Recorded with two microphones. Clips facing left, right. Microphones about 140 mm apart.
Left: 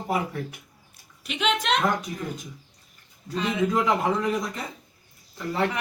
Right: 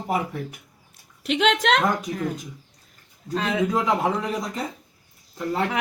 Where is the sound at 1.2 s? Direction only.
90° right.